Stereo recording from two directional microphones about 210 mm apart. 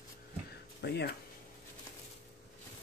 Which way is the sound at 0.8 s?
50° left (ahead or behind).